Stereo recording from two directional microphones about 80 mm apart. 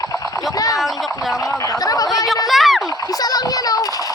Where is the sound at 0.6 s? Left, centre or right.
Left.